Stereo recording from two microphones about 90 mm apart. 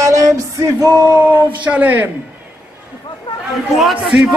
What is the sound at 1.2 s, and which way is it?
Speech, 20° right (ahead or behind).